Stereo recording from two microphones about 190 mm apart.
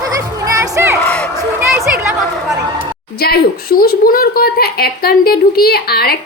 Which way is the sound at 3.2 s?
55° left (ahead or behind).